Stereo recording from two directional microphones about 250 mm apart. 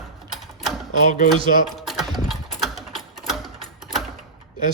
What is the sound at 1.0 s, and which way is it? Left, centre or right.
Speech, left.